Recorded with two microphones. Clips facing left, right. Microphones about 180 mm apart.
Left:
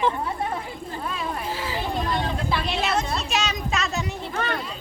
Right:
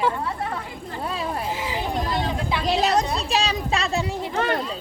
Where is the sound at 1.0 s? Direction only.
35° right (ahead or behind).